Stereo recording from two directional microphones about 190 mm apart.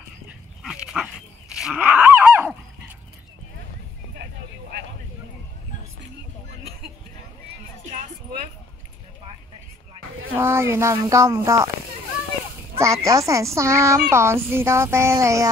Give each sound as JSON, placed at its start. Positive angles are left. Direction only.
{"t": 0.6, "sound": "dog", "side_deg": 0}
{"t": 10.3, "sound": "speech", "side_deg": -15}
{"t": 12.7, "sound": "speech", "side_deg": -15}